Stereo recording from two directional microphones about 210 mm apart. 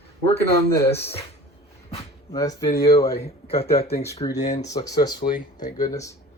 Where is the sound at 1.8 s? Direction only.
30° left (ahead or behind).